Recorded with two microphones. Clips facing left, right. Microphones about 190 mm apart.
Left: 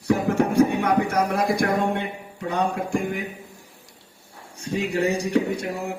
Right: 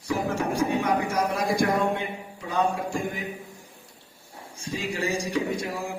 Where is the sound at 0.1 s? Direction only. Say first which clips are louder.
Left 6 dB; 60° left (ahead or behind).